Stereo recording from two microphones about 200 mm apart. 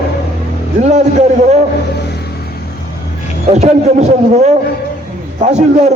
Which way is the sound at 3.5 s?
35° right (ahead or behind).